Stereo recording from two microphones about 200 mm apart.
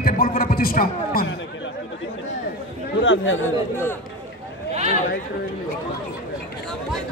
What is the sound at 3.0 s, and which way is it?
Speech, 70° left (ahead or behind).